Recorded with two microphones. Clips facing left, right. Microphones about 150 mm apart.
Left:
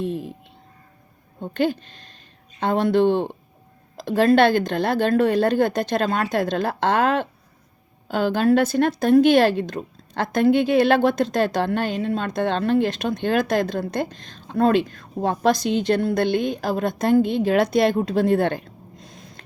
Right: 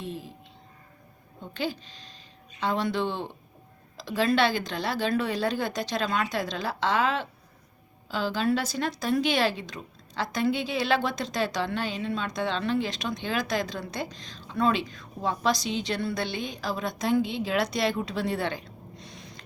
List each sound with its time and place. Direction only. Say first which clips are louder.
0.0 s a woman's voice: left 10 dB; 50° left (ahead or behind)
1.4 s a woman's voice: left 10 dB; 55° left (ahead or behind)